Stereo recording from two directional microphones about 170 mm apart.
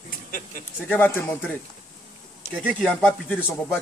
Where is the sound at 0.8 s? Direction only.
10° left (ahead or behind).